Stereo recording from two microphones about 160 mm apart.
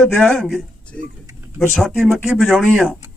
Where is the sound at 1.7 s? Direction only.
Centre (ahead or behind).